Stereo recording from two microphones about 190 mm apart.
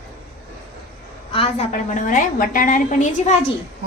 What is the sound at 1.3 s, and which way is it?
A woman's voice, 35° left (ahead or behind).